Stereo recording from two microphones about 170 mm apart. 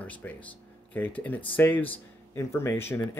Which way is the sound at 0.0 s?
10° left (ahead or behind).